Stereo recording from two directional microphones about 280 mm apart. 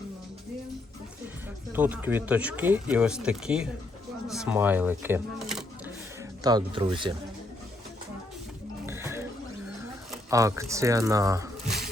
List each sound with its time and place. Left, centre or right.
1.7 s speech: centre
6.4 s speech: centre
8.9 s a sound: centre
10.1 s speech: centre